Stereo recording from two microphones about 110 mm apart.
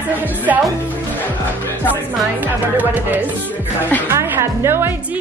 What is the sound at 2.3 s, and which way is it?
A woman's voice, 15° right (ahead or behind).